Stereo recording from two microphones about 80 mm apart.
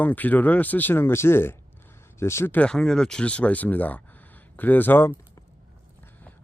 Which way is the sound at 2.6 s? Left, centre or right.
Centre.